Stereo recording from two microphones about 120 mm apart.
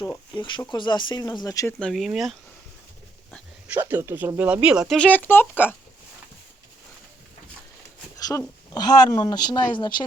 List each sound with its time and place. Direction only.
0.3 s speech: 40° left (ahead or behind)
1.8 s speech: centre (ahead or behind)
3.8 s speech: 15° right (ahead or behind)
4.9 s speech: 15° left (ahead or behind)
8.3 s speech: 30° left (ahead or behind)